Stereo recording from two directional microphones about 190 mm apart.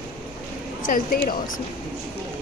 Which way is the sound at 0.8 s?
45° left (ahead or behind).